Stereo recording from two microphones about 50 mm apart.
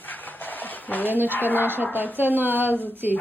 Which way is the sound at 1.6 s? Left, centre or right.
Right.